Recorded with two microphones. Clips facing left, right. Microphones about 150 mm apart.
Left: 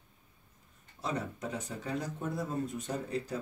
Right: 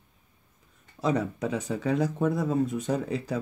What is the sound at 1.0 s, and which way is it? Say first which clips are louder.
Speech: right 9 dB; 90° right.